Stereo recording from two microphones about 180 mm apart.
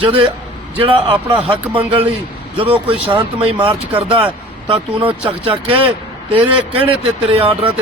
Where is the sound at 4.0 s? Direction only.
30° right (ahead or behind).